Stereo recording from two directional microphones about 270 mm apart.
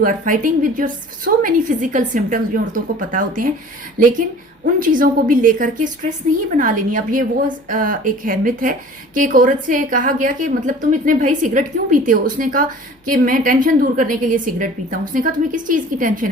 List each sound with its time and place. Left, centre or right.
0.0 s a woman's voice: right
4.6 s a woman's voice: right